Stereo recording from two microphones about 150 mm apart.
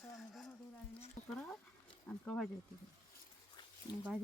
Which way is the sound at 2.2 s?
10° left (ahead or behind).